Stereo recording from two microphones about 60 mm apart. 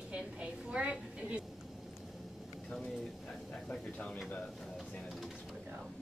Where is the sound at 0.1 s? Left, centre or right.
Centre.